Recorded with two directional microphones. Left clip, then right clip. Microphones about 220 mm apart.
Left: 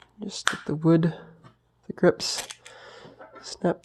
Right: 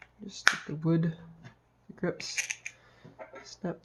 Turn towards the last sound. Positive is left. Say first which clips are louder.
# left 12 dB
turn(degrees=50)  # may be behind; listen again after turning